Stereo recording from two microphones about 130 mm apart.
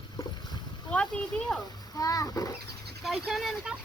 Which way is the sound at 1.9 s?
30° left (ahead or behind).